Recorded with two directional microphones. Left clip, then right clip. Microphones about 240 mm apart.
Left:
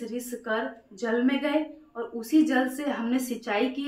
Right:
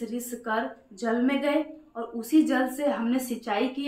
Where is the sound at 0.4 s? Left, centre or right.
Centre.